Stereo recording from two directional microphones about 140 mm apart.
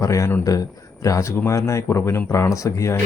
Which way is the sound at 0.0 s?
20° left (ahead or behind).